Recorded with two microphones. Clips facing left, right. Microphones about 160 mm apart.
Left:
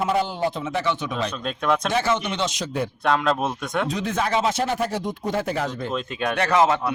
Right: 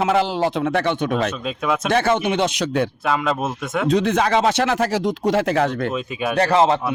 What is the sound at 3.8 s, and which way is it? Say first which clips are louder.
Speech: right 12 dB; 75° right (ahead or behind).